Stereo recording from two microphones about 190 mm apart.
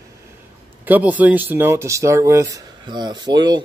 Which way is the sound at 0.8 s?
10° right (ahead or behind).